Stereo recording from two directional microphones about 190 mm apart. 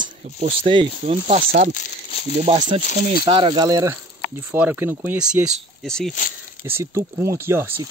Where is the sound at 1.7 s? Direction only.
30° left (ahead or behind).